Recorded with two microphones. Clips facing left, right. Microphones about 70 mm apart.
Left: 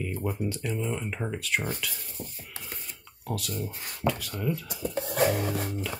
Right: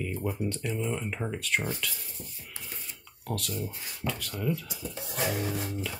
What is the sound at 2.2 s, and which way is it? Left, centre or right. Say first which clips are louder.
Cutlery: left 6 dB; left.